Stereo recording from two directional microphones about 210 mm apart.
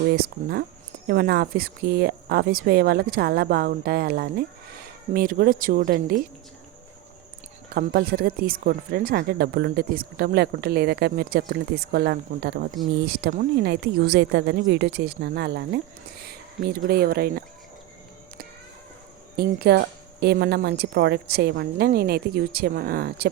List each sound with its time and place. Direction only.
0.2 s speech: 45° right (ahead or behind)
7.7 s speech: 45° right (ahead or behind)
19.4 s speech: 50° right (ahead or behind)